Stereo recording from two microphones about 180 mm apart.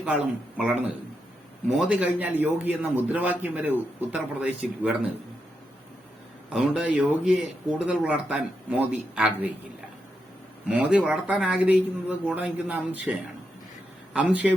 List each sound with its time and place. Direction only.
0.0 s a man's voice: 5° right (ahead or behind)
6.5 s speech: 5° right (ahead or behind)
10.7 s a man's voice: 5° right (ahead or behind)